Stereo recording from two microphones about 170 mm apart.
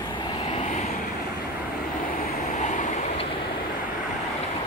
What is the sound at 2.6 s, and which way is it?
Vehicle, 45° left (ahead or behind).